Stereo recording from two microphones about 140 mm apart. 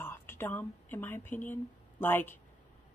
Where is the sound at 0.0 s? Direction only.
15° left (ahead or behind).